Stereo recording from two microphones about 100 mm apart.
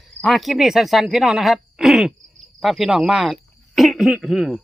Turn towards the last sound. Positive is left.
turn(degrees=0)  # may be behind; listen again after turning